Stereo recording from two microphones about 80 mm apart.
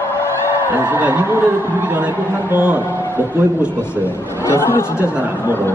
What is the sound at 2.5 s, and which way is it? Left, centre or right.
Speech, centre.